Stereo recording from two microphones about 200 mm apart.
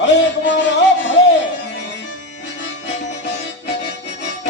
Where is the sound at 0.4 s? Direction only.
65° left (ahead or behind).